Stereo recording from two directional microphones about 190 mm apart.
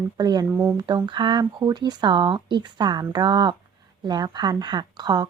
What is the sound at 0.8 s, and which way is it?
Speech, 25° right (ahead or behind).